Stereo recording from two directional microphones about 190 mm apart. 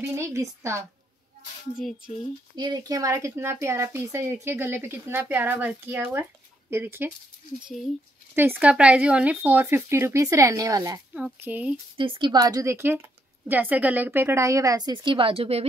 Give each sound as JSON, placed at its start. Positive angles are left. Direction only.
{"t": 0.0, "sound": "speech", "side_deg": -15}
{"t": 1.8, "sound": "speech", "side_deg": 0}
{"t": 2.5, "sound": "speech", "side_deg": -20}
{"t": 7.6, "sound": "speech", "side_deg": 0}
{"t": 11.1, "sound": "speech", "side_deg": -5}
{"t": 12.0, "sound": "a woman's voice", "side_deg": -25}